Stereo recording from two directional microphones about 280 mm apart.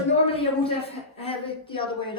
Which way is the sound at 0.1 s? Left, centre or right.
Centre.